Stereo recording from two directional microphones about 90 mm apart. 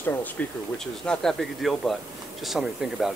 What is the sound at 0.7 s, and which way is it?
Speech, 10° left (ahead or behind).